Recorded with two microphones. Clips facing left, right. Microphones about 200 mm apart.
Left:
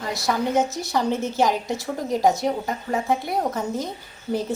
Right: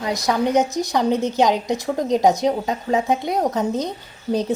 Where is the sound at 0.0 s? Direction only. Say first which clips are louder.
Right 4 dB; 15° right (ahead or behind).